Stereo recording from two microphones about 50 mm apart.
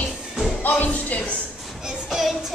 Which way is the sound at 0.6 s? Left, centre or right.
Left.